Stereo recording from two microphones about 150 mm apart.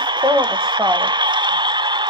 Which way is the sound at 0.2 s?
30° right (ahead or behind).